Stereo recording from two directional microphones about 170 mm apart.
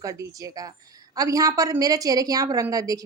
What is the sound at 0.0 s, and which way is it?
A woman's voice, 20° right (ahead or behind).